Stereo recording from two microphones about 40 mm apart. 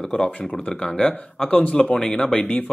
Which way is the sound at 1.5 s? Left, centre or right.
Left.